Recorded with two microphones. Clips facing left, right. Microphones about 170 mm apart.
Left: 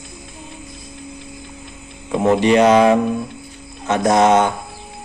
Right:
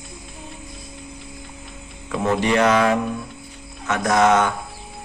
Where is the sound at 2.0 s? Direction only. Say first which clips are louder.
Left 6 dB; 25° left (ahead or behind).